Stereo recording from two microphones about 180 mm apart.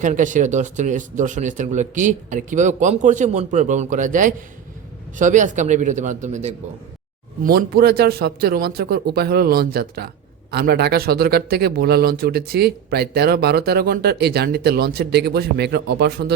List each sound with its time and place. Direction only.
0.0 s speech: 45° right (ahead or behind)
7.4 s speech: 55° right (ahead or behind)